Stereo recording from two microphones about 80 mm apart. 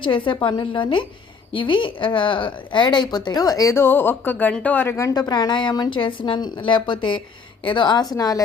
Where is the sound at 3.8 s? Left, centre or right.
Left.